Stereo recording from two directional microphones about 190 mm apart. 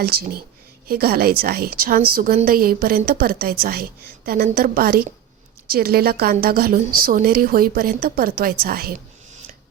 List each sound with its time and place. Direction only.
0.0 s a woman's voice: 55° right (ahead or behind)